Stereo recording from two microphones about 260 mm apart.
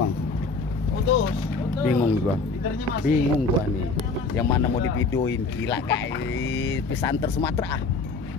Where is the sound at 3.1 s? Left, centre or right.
Left.